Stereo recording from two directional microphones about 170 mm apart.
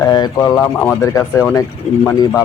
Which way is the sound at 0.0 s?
20° left (ahead or behind).